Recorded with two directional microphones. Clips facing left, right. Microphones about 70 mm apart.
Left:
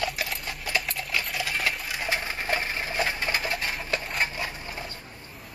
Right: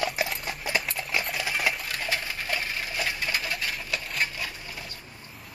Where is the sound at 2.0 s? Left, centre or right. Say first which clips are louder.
Left 3 dB; left.